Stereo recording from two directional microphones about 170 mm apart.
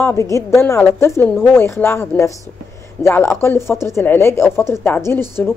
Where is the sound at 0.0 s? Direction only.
15° left (ahead or behind).